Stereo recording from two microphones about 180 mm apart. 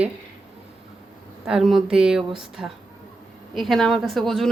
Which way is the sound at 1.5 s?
Centre (ahead or behind).